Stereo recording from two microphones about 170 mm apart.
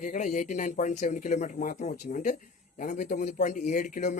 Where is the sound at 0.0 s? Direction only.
45° left (ahead or behind).